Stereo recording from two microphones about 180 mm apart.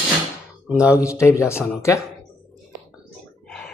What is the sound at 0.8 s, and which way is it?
Speech, 15° left (ahead or behind).